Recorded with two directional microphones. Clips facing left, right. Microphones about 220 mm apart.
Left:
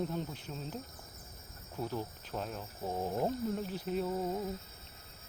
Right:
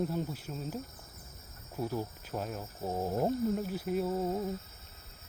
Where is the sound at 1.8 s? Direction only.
10° right (ahead or behind).